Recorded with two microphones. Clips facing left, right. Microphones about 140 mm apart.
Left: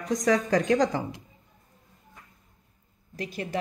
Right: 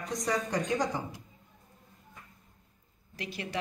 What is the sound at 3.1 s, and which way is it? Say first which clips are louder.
Speech: left 6 dB; 45° left (ahead or behind).